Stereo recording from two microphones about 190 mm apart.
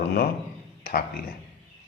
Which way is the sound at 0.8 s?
50° left (ahead or behind).